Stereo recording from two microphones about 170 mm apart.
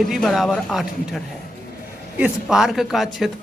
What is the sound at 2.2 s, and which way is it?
Speech, centre (ahead or behind).